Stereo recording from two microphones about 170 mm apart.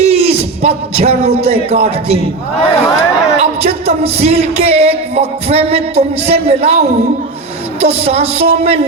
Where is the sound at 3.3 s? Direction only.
35° right (ahead or behind).